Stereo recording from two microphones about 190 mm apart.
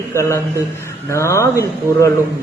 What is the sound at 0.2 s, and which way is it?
Speech, 15° left (ahead or behind).